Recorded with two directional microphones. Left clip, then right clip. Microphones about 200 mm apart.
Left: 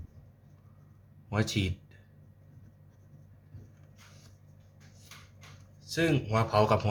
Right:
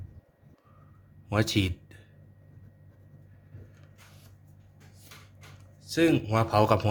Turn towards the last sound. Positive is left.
turn(degrees=-45)  # may be behind; listen again after turning